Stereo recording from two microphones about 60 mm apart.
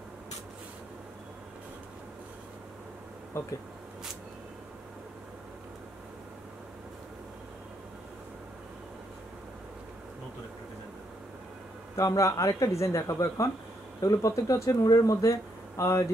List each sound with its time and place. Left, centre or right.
3.3 s speech: left
12.0 s speech: left
14.0 s speech: left